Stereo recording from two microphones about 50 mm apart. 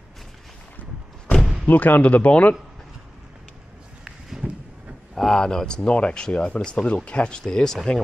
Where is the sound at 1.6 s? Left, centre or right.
Left.